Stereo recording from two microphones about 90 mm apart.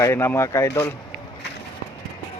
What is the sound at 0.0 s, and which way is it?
Speech, 30° left (ahead or behind).